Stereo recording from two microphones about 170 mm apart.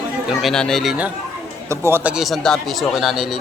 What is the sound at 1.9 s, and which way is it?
Speech, 10° right (ahead or behind).